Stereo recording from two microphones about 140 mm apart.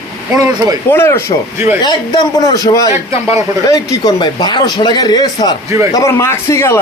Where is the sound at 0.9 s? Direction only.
15° left (ahead or behind).